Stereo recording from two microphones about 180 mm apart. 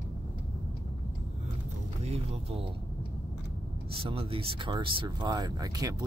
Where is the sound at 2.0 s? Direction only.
35° right (ahead or behind).